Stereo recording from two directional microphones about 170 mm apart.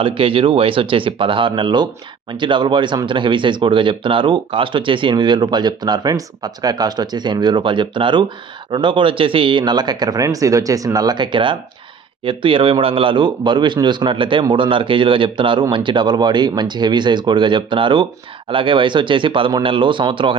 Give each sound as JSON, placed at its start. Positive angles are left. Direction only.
{"t": 0.0, "sound": "speech", "side_deg": -30}